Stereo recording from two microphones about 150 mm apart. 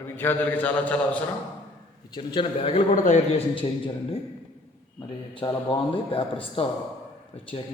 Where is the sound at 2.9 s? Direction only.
60° left (ahead or behind).